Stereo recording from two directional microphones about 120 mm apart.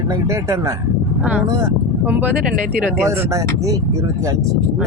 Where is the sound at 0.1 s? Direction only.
25° right (ahead or behind).